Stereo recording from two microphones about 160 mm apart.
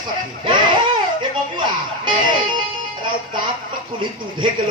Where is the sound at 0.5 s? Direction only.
30° right (ahead or behind).